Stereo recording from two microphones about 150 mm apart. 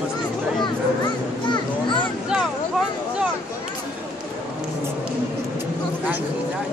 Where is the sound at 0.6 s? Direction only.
30° left (ahead or behind).